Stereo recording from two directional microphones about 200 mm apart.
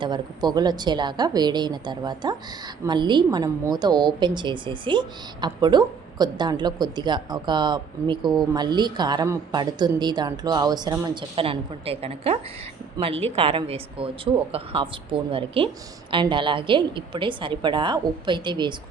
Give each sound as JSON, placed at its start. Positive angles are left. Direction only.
{"t": 0.0, "sound": "a woman's voice", "side_deg": -20}